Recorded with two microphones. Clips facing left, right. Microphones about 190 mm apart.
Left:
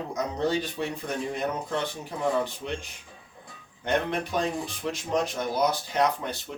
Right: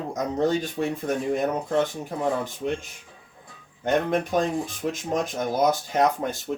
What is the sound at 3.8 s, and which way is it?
Speech, 45° right (ahead or behind).